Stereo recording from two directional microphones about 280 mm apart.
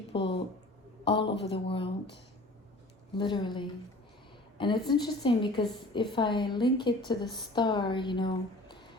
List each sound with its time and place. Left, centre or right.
0.1 s a sound: centre
1.0 s a woman's voice: centre
3.2 s a woman's voice: centre